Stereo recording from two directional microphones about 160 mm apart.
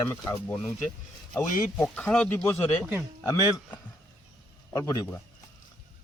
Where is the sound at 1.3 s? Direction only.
5° left (ahead or behind).